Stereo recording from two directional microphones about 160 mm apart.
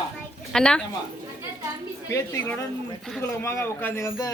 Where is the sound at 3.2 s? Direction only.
15° left (ahead or behind).